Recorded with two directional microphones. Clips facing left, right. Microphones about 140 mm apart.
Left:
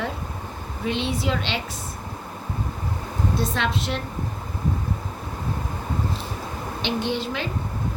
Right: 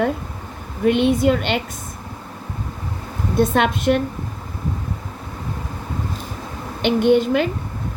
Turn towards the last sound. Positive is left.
turn(degrees=-55)  # may be behind; listen again after turning